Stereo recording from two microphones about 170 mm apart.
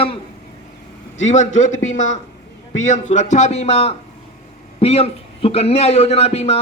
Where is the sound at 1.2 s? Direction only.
45° left (ahead or behind).